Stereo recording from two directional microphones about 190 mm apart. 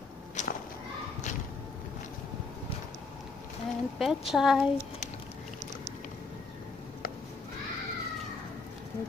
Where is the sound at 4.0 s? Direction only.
Centre (ahead or behind).